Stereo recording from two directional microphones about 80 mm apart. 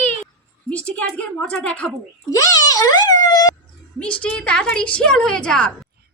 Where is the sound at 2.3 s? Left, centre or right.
Left.